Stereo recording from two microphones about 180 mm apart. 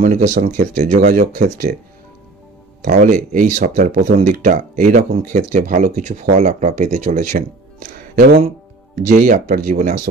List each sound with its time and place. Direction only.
0.0 s speech: 45° right (ahead or behind)
3.3 s speech: 45° right (ahead or behind)